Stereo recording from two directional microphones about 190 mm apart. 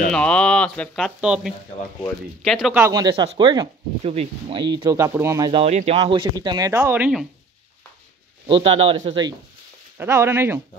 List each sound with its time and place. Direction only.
0.1 s speech: 5° left (ahead or behind)
2.8 s speech: 20° right (ahead or behind)
5.5 s speech: 35° right (ahead or behind); by 7.2 s 5° right (ahead or behind)
8.5 s a man's voice: 30° right (ahead or behind)
9.9 s speech: 15° right (ahead or behind)